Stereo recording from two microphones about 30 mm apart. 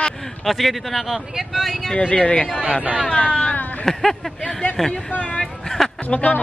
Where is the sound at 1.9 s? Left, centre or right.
Left.